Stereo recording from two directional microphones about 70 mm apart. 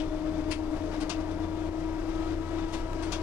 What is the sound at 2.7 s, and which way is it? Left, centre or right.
Vehicle, centre.